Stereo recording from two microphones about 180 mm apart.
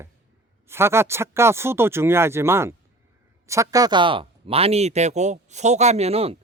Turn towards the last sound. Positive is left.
turn(degrees=-35)  # may be behind; listen again after turning